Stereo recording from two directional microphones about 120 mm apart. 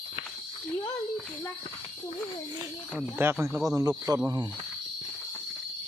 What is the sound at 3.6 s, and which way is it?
Speech, 30° right (ahead or behind).